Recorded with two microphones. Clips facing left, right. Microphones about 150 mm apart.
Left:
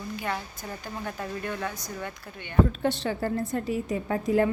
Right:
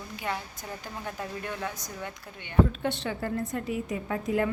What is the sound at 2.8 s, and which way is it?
A woman's voice, 35° left (ahead or behind).